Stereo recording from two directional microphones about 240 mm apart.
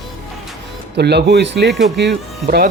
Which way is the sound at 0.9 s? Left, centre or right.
Right.